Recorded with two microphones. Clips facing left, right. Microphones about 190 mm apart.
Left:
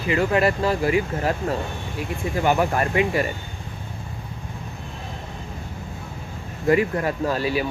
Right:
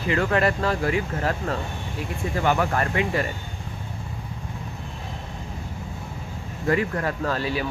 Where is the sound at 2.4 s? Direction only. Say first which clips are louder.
Left 2 dB; 15° left (ahead or behind).